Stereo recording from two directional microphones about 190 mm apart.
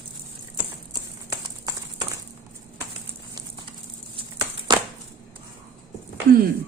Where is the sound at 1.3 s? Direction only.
20° right (ahead or behind).